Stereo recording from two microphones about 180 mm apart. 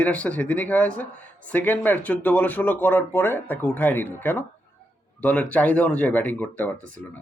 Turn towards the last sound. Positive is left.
turn(degrees=5)  # may be behind; listen again after turning